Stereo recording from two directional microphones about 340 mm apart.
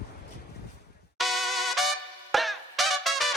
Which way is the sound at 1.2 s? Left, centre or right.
Centre.